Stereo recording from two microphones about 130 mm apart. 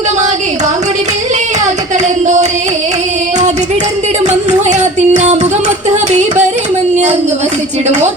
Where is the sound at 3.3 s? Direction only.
65° right (ahead or behind).